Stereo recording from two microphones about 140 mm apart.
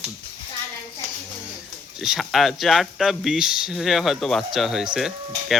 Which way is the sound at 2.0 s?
Centre (ahead or behind).